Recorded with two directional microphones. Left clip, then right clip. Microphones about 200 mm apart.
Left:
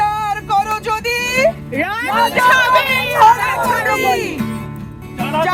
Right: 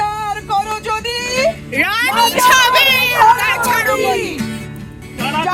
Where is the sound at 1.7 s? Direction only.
35° left (ahead or behind).